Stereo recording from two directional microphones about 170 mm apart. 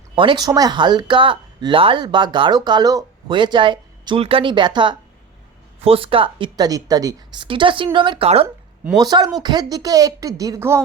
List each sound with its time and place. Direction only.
0.2 s speech: 25° right (ahead or behind)
9.0 s speech: 25° right (ahead or behind)